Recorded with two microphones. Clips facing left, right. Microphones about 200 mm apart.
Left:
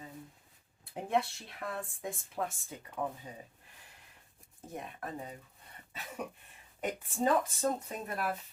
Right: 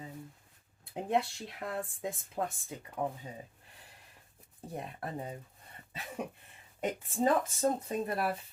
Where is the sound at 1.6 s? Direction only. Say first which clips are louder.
Right 2 dB; 25° right (ahead or behind).